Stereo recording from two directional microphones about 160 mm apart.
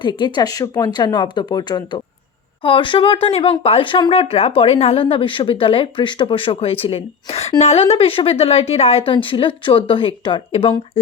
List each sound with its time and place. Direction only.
0.0 s speech: 30° left (ahead or behind)